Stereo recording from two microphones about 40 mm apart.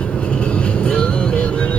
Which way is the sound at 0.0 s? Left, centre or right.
Left.